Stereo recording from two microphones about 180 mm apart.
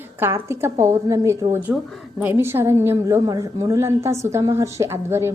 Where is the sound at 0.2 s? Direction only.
15° right (ahead or behind).